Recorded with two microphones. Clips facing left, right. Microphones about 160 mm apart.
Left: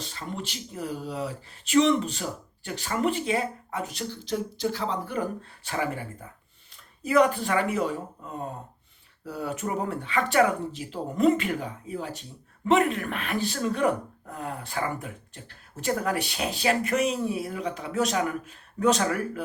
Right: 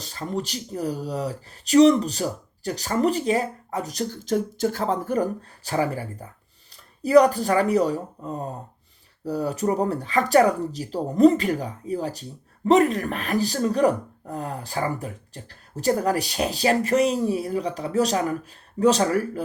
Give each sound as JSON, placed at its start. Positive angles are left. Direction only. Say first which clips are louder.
{"t": 0.0, "sound": "speech", "louder": "right 6 dB", "side_deg": -40}